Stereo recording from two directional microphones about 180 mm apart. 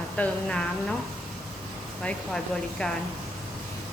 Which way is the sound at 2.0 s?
5° left (ahead or behind).